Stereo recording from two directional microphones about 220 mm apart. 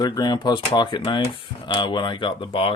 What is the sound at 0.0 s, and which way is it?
Speech, 20° left (ahead or behind).